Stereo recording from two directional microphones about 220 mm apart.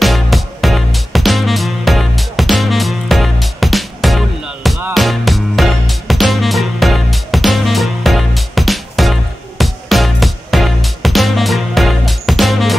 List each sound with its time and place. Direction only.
0.0 s music: centre (ahead or behind)